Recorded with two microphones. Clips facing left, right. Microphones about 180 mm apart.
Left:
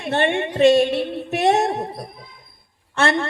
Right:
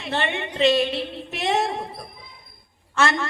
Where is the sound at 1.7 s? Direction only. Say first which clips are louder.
Left 5 dB; 40° left (ahead or behind).